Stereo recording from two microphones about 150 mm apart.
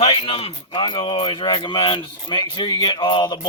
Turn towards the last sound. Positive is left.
turn(degrees=30)  # may be behind; listen again after turning